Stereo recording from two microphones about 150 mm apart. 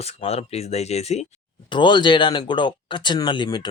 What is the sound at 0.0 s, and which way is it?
Speech, 45° left (ahead or behind).